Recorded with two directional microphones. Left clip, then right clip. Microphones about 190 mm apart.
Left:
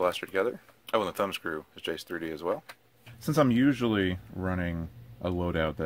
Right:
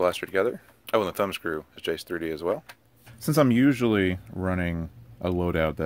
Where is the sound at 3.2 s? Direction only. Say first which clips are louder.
Right 3 dB; 35° right (ahead or behind).